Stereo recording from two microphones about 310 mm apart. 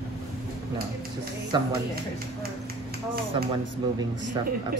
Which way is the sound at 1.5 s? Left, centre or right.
Centre.